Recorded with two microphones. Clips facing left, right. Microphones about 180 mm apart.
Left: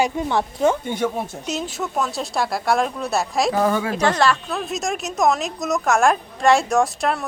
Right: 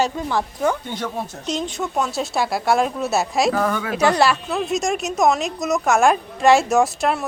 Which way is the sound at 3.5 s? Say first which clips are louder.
Left 2 dB; 25° left (ahead or behind).